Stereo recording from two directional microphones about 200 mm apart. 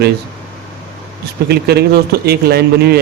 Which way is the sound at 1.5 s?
50° right (ahead or behind).